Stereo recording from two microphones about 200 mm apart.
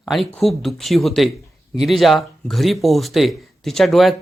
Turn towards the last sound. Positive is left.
turn(degrees=0)  # may be behind; listen again after turning